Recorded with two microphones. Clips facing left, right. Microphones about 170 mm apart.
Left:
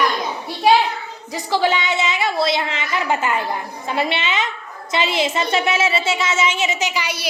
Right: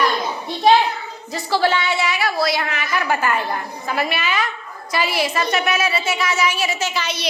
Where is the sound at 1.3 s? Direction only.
15° left (ahead or behind).